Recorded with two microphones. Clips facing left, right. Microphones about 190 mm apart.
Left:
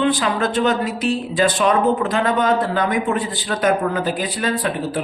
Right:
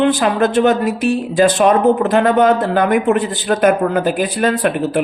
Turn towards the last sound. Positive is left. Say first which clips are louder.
# right 6 dB
turn(degrees=-60)  # may be behind; listen again after turning